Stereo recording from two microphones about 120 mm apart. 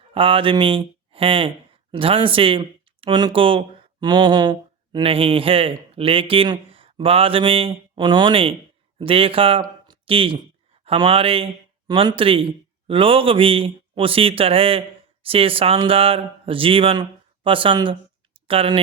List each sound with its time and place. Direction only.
0.1 s speech: 45° right (ahead or behind)
9.8 s a sound: 45° right (ahead or behind)
10.8 s speech: 50° right (ahead or behind)